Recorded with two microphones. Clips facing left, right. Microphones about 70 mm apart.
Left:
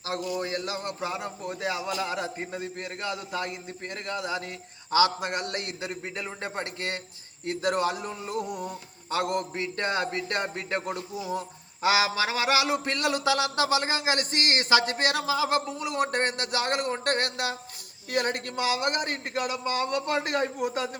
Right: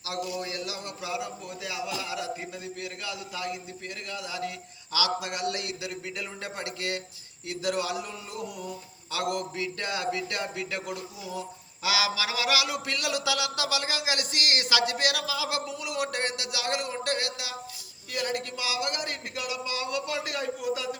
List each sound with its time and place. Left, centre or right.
0.0 s speech: left